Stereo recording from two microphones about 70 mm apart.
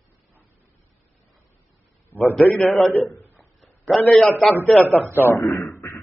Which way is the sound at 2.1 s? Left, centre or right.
Left.